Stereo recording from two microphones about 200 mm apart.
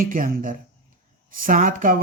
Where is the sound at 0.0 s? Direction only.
45° right (ahead or behind).